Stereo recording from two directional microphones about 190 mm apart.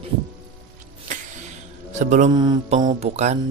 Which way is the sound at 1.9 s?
40° right (ahead or behind).